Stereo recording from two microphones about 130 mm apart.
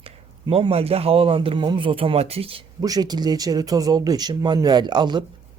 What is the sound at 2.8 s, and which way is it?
Speech, 30° right (ahead or behind).